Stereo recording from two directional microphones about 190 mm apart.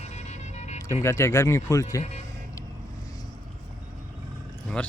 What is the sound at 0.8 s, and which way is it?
Speech, 15° left (ahead or behind).